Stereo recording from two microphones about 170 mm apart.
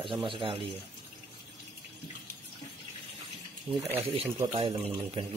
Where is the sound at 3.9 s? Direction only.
35° right (ahead or behind).